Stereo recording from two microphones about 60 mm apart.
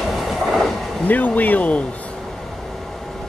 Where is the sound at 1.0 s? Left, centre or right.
Left.